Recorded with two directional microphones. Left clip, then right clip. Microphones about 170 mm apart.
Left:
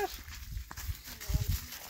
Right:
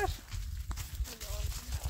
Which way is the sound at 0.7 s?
30° left (ahead or behind).